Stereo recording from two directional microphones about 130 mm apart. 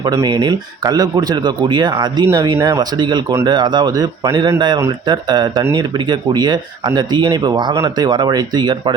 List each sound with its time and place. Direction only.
0.0 s speech: 30° right (ahead or behind)